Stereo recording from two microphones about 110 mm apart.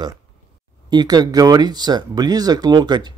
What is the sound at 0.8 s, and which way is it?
A man's voice, 40° right (ahead or behind).